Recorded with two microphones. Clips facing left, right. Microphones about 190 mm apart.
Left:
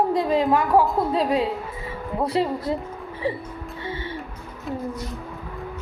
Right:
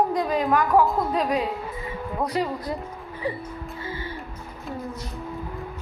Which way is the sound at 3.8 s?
25° left (ahead or behind).